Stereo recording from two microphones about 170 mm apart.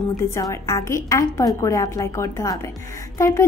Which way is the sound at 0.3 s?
20° left (ahead or behind).